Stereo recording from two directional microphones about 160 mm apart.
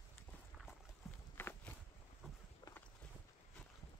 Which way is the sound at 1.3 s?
10° left (ahead or behind).